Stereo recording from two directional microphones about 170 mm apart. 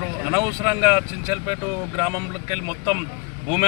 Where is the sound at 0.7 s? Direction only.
25° right (ahead or behind).